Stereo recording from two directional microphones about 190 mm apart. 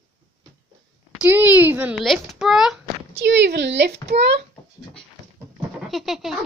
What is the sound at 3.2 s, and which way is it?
A child's voice, 70° right (ahead or behind).